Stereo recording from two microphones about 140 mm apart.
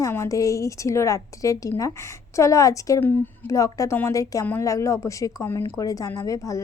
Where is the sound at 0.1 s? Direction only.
20° left (ahead or behind).